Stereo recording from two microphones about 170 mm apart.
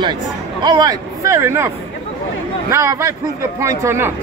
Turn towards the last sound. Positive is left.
turn(degrees=-15)  # may be behind; listen again after turning